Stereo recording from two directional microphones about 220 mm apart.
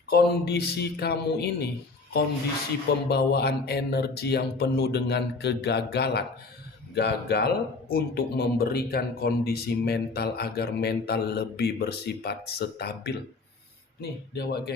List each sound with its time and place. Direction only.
0.1 s a man's voice: 45° left (ahead or behind)
3.1 s a man's voice: 45° left (ahead or behind)